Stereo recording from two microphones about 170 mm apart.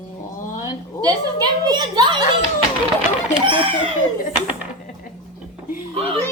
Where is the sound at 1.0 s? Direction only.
25° right (ahead or behind).